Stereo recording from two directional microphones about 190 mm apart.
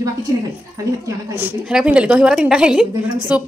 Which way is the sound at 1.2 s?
10° right (ahead or behind).